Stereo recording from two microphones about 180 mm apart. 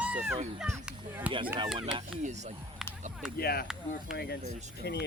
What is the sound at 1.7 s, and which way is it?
Speech, 25° right (ahead or behind).